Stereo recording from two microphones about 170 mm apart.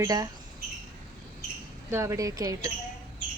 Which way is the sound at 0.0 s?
20° right (ahead or behind).